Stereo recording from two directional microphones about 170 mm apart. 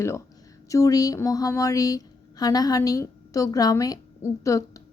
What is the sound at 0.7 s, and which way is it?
A woman's voice, 20° left (ahead or behind).